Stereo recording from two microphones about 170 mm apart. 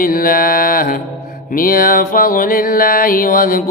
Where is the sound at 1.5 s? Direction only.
55° left (ahead or behind).